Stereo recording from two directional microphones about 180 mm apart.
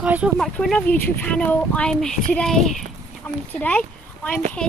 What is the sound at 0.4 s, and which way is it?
Speech, 5° left (ahead or behind).